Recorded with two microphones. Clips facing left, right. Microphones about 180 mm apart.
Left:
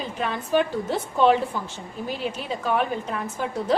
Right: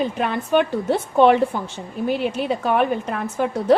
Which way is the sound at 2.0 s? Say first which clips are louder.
Right 8 dB; 65° right (ahead or behind).